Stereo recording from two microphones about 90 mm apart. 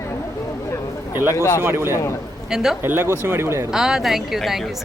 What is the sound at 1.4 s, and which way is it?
Speech, 35° left (ahead or behind).